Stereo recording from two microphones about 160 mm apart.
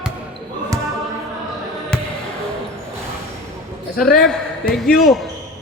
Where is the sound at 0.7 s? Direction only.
20° right (ahead or behind).